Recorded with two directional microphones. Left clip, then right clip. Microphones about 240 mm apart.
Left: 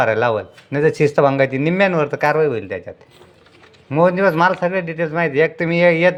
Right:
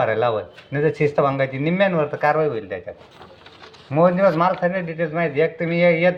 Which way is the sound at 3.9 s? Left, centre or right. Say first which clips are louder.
Left 1 dB; left.